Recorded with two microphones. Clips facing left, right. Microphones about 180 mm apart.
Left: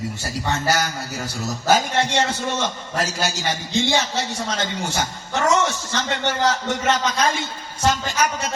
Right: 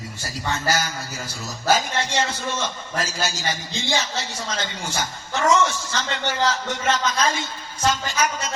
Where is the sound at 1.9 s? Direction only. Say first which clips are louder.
Left 4 dB; 60° left (ahead or behind).